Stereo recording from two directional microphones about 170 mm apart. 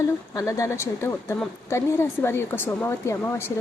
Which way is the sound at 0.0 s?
20° left (ahead or behind).